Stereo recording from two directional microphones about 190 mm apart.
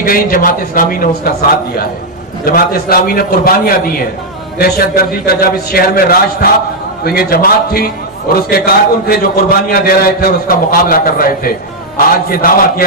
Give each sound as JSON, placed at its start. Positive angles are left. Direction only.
{"t": 0.0, "sound": "a man's voice", "side_deg": 50}
{"t": 2.4, "sound": "a man's voice", "side_deg": 50}